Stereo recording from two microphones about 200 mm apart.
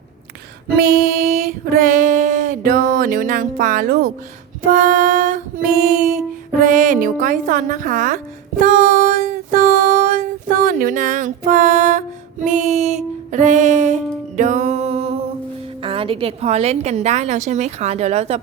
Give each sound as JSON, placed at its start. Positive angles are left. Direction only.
{"t": 0.8, "sound": "female singing", "side_deg": -50}
{"t": 4.6, "sound": "mantra", "side_deg": -40}
{"t": 5.8, "sound": "music", "side_deg": -40}
{"t": 15.8, "sound": "a woman's voice", "side_deg": -25}